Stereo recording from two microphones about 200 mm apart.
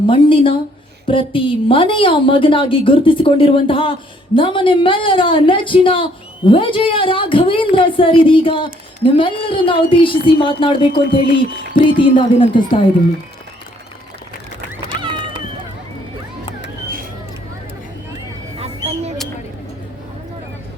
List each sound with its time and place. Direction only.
0.1 s a woman's voice: 25° left (ahead or behind)
14.8 s run: 25° right (ahead or behind)
18.6 s a sound: 30° right (ahead or behind)